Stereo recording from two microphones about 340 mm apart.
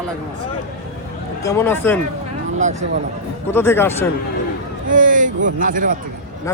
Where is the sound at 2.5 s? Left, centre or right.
Right.